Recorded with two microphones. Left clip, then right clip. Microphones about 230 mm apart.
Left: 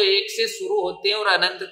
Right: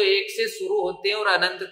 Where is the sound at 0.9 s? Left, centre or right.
Centre.